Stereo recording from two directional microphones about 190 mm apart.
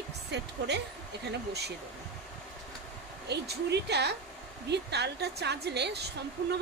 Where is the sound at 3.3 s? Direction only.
60° right (ahead or behind).